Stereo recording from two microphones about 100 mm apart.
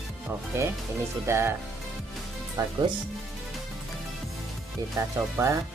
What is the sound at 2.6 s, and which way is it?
Speech, 40° right (ahead or behind).